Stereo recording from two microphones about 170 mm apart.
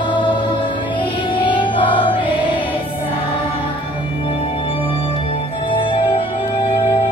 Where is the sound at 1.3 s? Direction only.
30° left (ahead or behind).